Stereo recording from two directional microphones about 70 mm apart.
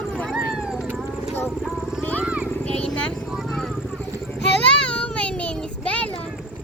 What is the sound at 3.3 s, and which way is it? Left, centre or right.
Vehicle, centre.